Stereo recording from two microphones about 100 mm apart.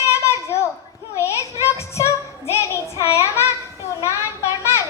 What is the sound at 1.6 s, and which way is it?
Music, 30° left (ahead or behind).